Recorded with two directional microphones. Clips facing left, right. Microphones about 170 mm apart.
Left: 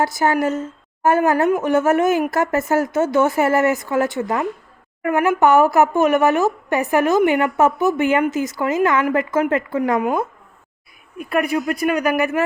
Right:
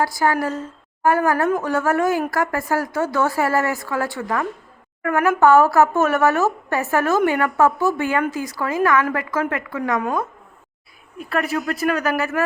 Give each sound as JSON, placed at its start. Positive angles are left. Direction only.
{"t": 0.0, "sound": "a woman's voice", "side_deg": 20}
{"t": 11.2, "sound": "speech", "side_deg": 15}